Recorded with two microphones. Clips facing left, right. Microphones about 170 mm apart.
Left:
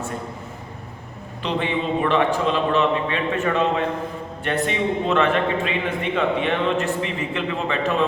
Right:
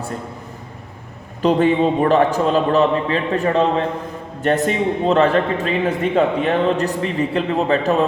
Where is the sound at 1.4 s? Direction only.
40° right (ahead or behind).